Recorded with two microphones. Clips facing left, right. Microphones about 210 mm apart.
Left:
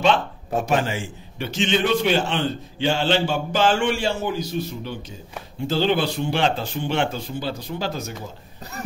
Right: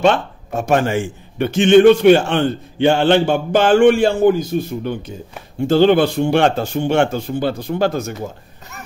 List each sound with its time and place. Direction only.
0.0 s speech: 45° right (ahead or behind)